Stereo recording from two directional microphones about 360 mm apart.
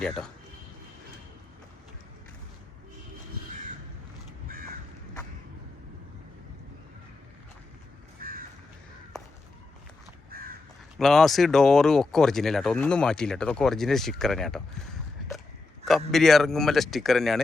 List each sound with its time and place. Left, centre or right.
0.0 s speech: centre
4.4 s crow: right
8.2 s crow: right
10.3 s crow: right
10.9 s speech: centre
15.9 s speech: centre